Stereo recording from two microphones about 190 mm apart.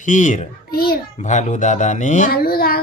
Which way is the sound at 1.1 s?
40° left (ahead or behind).